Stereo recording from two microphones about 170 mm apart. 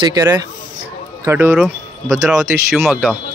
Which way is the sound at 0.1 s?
20° right (ahead or behind).